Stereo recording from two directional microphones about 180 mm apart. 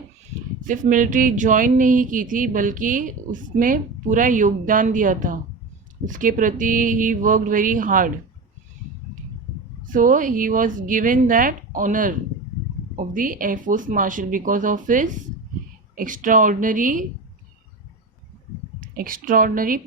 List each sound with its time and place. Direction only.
0.6 s speech: 45° right (ahead or behind)
9.8 s speech: 50° right (ahead or behind)
18.8 s a woman's voice: 50° right (ahead or behind)